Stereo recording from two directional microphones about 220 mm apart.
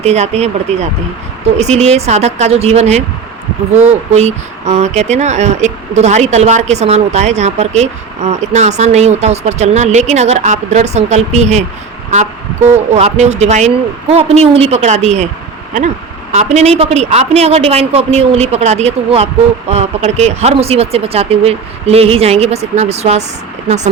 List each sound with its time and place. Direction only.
0.0 s speech: 30° right (ahead or behind)
16.3 s speech: 30° right (ahead or behind)